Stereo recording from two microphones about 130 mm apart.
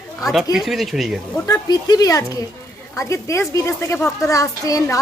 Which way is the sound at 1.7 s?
30° left (ahead or behind).